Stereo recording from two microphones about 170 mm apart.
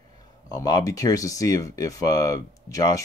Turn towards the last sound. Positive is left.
turn(degrees=20)  # may be behind; listen again after turning